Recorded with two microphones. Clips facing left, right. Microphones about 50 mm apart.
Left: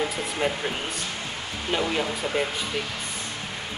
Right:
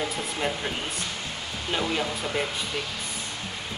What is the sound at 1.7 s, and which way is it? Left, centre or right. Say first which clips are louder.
Speech: left 2 dB; centre.